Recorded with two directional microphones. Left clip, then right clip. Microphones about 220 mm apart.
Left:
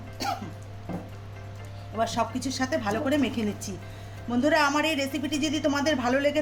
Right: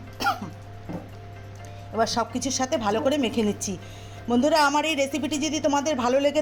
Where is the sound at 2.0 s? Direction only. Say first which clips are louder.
Right 3 dB; 25° right (ahead or behind).